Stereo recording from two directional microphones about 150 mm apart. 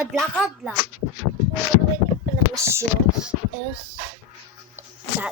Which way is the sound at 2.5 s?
20° right (ahead or behind).